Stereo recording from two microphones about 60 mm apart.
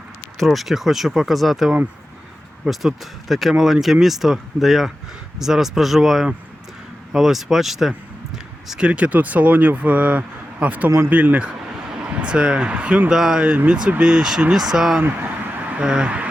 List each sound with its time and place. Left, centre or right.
0.3 s speech: centre
8.9 s speech: right
13.1 s speech: centre
13.7 s speech: centre